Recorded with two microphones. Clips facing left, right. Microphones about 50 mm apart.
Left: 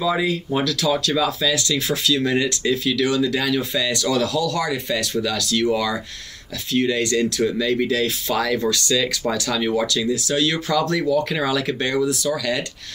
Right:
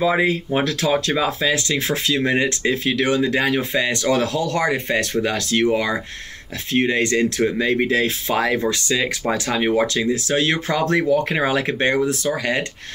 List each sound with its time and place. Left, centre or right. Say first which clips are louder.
0.0 s speech: right 3 dB; right